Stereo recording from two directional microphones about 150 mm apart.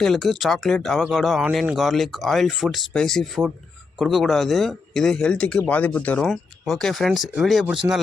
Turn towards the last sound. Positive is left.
turn(degrees=0)  # may be behind; listen again after turning